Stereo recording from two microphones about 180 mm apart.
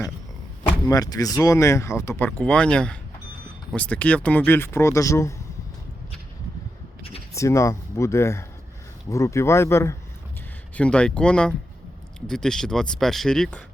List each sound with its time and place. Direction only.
0.9 s speech: 20° left (ahead or behind)
7.3 s speech: 15° left (ahead or behind)